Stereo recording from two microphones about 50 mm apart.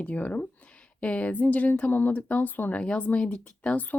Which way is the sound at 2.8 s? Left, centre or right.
Left.